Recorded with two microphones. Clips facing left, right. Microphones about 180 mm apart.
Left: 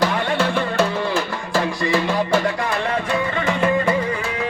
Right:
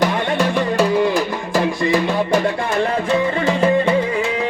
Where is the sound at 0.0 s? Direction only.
15° right (ahead or behind).